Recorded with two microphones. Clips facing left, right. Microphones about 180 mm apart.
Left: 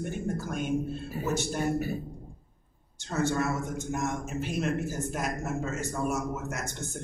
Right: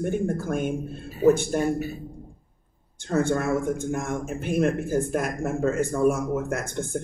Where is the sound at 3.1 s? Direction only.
55° right (ahead or behind).